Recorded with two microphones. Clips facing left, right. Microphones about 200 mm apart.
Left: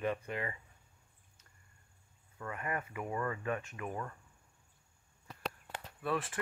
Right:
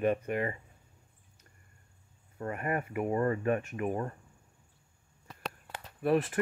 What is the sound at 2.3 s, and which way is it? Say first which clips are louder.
Speech: right 6 dB; 40° right (ahead or behind).